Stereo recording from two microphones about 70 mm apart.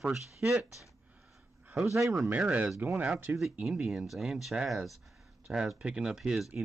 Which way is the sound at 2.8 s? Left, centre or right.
Right.